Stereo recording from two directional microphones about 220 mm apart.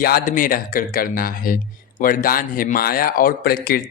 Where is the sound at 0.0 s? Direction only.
40° left (ahead or behind).